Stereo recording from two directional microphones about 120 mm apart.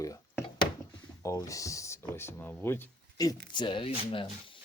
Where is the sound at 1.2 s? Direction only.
25° left (ahead or behind).